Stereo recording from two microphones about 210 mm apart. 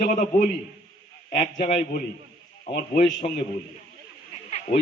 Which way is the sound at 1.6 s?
40° left (ahead or behind).